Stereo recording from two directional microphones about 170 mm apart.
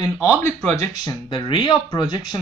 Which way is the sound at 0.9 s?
25° left (ahead or behind).